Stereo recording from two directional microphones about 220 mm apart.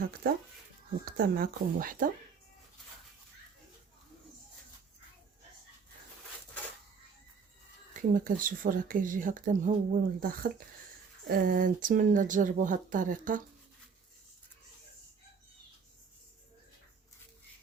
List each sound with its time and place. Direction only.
0.0 s speech: 40° right (ahead or behind)
8.1 s speech: 40° right (ahead or behind)